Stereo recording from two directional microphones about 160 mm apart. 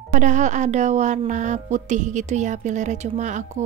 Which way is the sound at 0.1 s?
50° right (ahead or behind).